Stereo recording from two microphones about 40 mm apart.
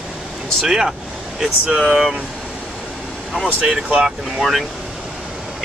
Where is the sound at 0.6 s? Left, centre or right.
Centre.